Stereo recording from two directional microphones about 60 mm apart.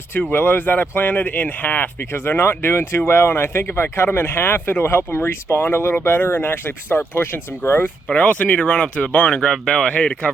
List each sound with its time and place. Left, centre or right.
0.1 s speech: left
8.1 s speech: left